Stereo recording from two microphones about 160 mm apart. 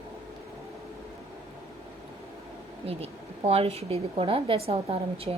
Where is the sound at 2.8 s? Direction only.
40° right (ahead or behind).